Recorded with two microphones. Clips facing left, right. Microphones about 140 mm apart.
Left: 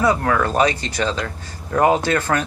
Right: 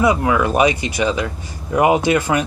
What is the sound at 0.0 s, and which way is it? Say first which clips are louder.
Speech: right 2 dB; 10° right (ahead or behind).